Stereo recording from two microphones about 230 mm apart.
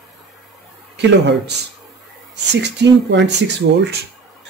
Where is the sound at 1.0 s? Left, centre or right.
Right.